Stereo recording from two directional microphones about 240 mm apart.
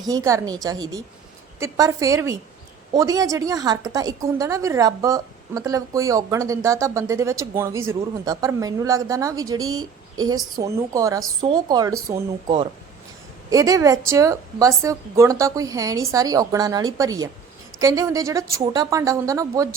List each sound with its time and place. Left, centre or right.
0.0 s a woman's voice: centre
9.6 s speech: right
10.2 s a woman's voice: centre